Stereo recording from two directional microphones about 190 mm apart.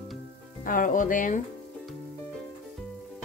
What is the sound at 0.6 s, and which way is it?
Speech, 45° left (ahead or behind).